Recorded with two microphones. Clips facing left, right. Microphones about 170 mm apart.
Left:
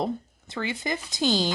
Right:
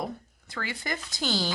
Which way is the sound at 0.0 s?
20° left (ahead or behind).